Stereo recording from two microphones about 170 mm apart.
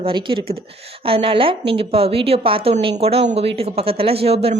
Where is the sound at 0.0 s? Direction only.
30° right (ahead or behind).